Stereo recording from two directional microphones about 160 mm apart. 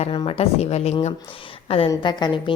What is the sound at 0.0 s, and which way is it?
A woman's voice, 35° left (ahead or behind).